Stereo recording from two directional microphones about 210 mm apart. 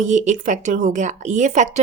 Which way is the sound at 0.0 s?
35° right (ahead or behind).